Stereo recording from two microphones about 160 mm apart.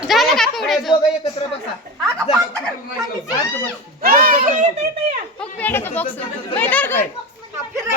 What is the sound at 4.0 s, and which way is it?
Speech, 65° right (ahead or behind).